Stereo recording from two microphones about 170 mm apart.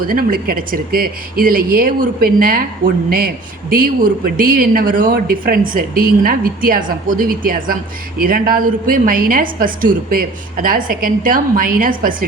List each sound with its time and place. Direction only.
0.1 s speech: 55° right (ahead or behind)